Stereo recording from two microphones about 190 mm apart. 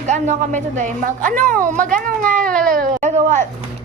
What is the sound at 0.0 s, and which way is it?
A woman's voice, 40° right (ahead or behind).